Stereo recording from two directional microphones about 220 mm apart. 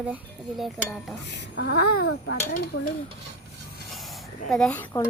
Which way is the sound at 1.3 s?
50° left (ahead or behind).